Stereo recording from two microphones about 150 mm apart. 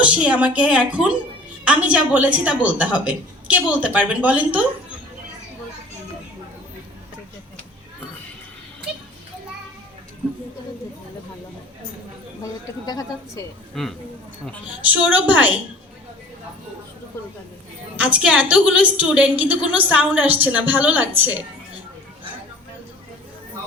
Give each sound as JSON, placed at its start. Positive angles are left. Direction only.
{"t": 0.0, "sound": "a woman's voice", "side_deg": -10}
{"t": 12.4, "sound": "a sound", "side_deg": 25}
{"t": 13.7, "sound": "speech", "side_deg": 5}
{"t": 14.8, "sound": "a woman's voice", "side_deg": -10}
{"t": 17.9, "sound": "a woman's voice", "side_deg": -10}